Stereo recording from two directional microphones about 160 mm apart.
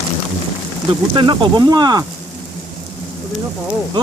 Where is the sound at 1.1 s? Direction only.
30° right (ahead or behind).